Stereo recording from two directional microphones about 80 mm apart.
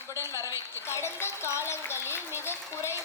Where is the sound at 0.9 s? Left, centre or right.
Left.